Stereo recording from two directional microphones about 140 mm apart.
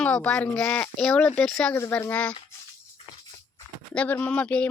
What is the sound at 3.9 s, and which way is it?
Speech, 10° left (ahead or behind).